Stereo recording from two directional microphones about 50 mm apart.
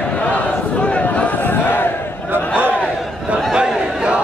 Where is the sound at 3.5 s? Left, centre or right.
Centre.